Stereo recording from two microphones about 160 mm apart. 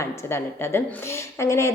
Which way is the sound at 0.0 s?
15° left (ahead or behind).